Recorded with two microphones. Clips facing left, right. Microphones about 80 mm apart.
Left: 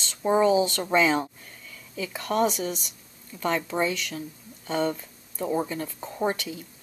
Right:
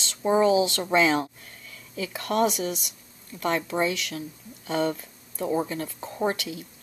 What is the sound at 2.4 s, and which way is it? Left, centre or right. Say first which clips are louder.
Speech: right 1 dB; centre.